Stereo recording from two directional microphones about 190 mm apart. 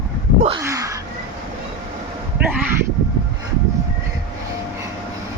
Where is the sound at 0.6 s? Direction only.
15° right (ahead or behind).